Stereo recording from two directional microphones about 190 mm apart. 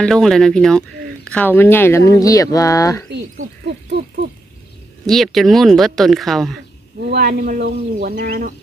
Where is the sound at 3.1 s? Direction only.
65° right (ahead or behind).